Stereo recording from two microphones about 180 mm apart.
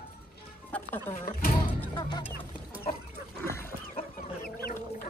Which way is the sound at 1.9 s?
25° left (ahead or behind).